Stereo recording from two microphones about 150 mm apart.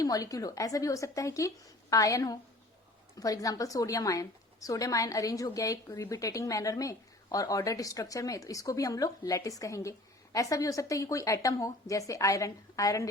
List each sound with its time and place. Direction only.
0.0 s a woman's voice: 25° left (ahead or behind)